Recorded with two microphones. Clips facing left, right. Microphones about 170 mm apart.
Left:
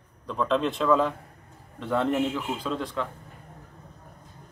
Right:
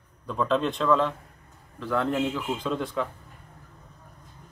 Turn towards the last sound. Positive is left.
turn(degrees=0)  # may be behind; listen again after turning